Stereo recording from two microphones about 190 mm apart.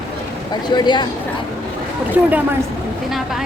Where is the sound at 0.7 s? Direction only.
25° left (ahead or behind).